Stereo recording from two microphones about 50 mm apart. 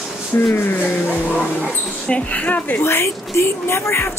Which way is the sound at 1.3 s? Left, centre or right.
Left.